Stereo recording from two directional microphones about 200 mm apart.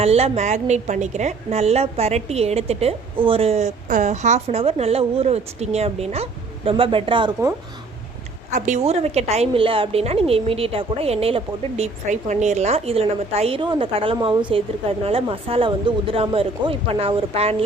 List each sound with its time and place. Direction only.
0.0 s a woman's voice: 30° right (ahead or behind)
8.4 s a woman's voice: 40° right (ahead or behind)